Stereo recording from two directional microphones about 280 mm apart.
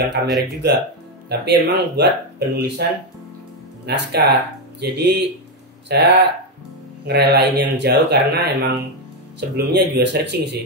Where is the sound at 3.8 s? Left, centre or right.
Right.